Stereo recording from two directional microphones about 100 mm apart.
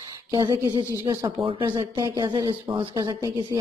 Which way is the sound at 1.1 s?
30° right (ahead or behind).